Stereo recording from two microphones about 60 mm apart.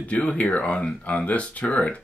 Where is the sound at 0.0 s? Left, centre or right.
Left.